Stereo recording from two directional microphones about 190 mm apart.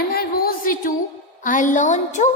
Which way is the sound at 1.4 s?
45° left (ahead or behind).